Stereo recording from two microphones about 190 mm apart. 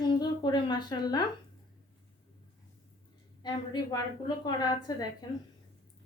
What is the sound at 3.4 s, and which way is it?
Speech, 20° left (ahead or behind).